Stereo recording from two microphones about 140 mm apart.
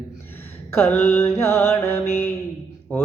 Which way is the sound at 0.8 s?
15° left (ahead or behind).